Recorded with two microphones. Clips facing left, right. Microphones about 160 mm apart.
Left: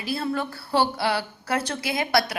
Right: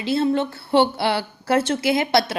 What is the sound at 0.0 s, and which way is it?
A woman's voice, 25° right (ahead or behind).